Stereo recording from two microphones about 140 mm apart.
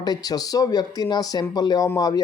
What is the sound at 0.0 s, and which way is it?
Speech, 30° left (ahead or behind).